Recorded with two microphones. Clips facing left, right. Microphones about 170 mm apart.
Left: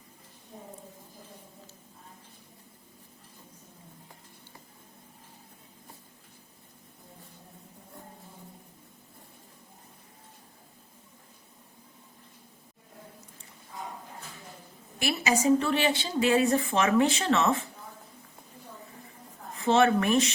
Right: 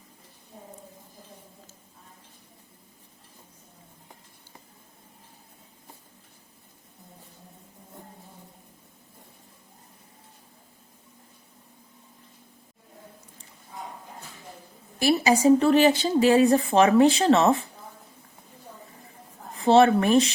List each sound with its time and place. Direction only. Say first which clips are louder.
14.9 s speech: right 7 dB; 35° right (ahead or behind)
19.5 s speech: right 5 dB; 35° right (ahead or behind)